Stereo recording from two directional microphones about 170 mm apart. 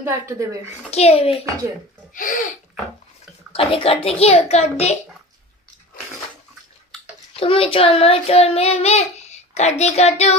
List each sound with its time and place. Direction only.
0.0 s speech: 20° right (ahead or behind)
0.8 s a child's voice: 40° left (ahead or behind)
2.1 s speech: 50° left (ahead or behind)
3.5 s a child's voice: 35° left (ahead or behind)
7.3 s a child's voice: 35° left (ahead or behind)